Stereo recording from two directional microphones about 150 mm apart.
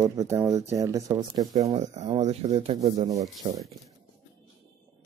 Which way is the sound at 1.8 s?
50° right (ahead or behind).